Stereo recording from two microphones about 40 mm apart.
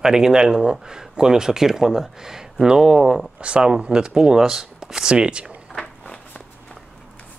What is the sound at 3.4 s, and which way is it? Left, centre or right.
A man's voice, right.